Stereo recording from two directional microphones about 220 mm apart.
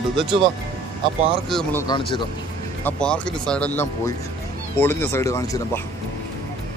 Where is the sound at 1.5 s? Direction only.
Centre (ahead or behind).